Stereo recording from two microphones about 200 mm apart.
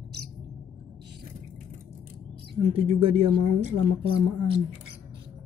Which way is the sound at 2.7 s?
25° right (ahead or behind).